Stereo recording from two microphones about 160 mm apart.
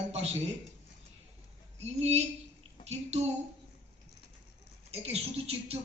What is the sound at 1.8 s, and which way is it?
A woman's voice, 40° right (ahead or behind).